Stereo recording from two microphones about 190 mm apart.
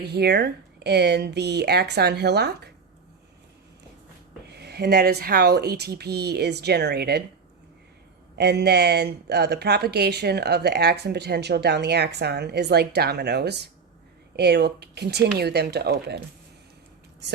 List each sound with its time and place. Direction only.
0.0 s speech: 60° right (ahead or behind)
4.4 s speech: 60° right (ahead or behind)
8.4 s speech: 60° right (ahead or behind)